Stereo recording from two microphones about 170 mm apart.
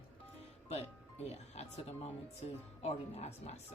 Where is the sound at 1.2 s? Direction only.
40° left (ahead or behind).